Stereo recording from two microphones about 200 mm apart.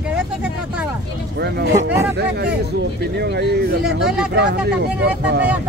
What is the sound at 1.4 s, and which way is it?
Speech, 60° right (ahead or behind).